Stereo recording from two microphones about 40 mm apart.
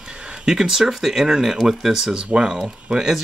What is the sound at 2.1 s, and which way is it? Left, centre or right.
Speech, right.